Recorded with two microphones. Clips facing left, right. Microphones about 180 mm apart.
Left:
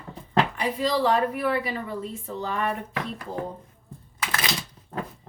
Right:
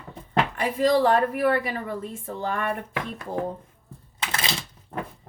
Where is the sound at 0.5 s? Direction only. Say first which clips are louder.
Right 4 dB; 50° right (ahead or behind).